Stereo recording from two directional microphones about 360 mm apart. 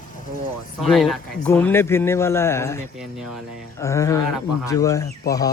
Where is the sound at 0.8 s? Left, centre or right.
Centre.